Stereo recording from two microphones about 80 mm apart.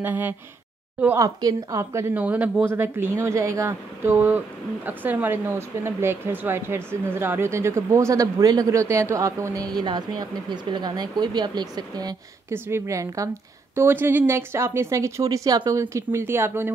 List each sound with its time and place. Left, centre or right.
0.0 s speech: right
1.1 s speech: right
2.1 s speech: centre; by 8.7 s right
8.7 s speech: right
12.4 s speech: right
13.7 s speech: right
15.7 s speech: right